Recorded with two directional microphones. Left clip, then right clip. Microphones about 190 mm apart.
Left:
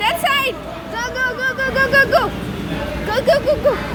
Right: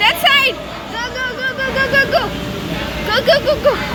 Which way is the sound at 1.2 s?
30° left (ahead or behind).